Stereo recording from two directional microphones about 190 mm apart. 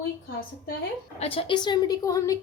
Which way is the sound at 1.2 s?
30° left (ahead or behind).